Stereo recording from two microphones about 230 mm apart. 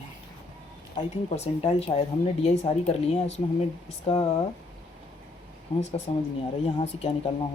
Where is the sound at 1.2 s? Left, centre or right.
Left.